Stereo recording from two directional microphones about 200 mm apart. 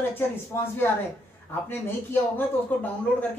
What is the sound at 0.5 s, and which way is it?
A woman's voice, 10° left (ahead or behind).